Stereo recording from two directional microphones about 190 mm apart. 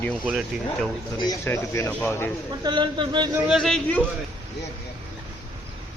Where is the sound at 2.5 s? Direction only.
25° right (ahead or behind).